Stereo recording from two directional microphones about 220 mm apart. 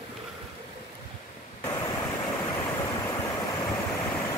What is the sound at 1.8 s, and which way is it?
Vehicle, 15° left (ahead or behind).